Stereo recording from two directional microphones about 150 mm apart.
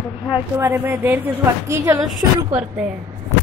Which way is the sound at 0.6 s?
15° right (ahead or behind).